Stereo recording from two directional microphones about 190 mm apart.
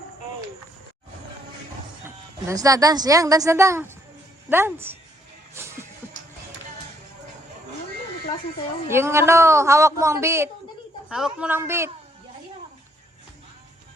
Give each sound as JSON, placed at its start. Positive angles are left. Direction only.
{"t": 2.0, "sound": "a woman's voice", "side_deg": -15}
{"t": 5.6, "sound": "music", "side_deg": -15}
{"t": 8.9, "sound": "a man's voice", "side_deg": -15}